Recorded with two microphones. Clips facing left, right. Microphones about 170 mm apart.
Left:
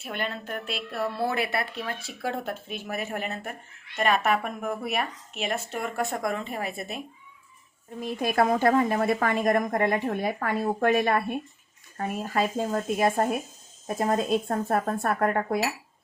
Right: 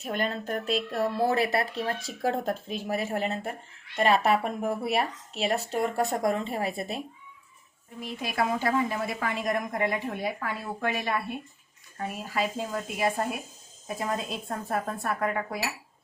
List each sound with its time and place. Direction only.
0.0 s speech: 40° right (ahead or behind)
8.0 s a woman's voice: 50° left (ahead or behind)